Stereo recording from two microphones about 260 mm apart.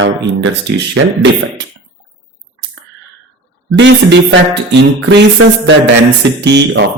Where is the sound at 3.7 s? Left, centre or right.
Right.